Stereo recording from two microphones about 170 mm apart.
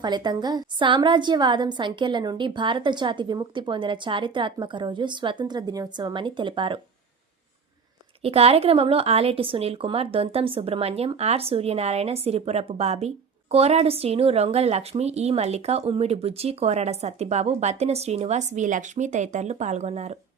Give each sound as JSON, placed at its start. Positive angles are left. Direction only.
{"t": 0.0, "sound": "a woman's voice", "side_deg": -25}
{"t": 8.2, "sound": "a woman's voice", "side_deg": -35}